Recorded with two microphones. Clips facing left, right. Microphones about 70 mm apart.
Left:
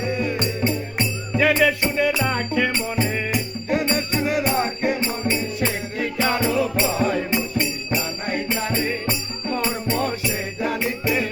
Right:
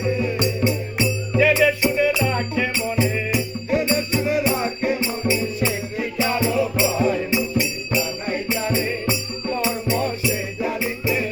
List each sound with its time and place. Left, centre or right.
0.2 s music: left
10.6 s music: left